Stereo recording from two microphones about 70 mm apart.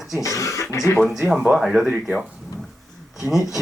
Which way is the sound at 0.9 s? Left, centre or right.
Centre.